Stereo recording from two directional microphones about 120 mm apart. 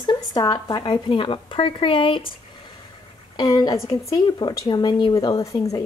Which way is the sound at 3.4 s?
35° left (ahead or behind).